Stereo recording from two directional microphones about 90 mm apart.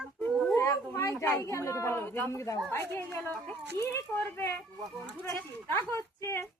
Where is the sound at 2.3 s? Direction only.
35° left (ahead or behind).